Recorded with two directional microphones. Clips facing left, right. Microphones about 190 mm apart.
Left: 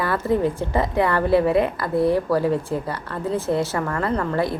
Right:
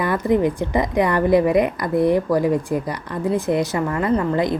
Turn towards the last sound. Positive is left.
turn(degrees=-15)  # may be behind; listen again after turning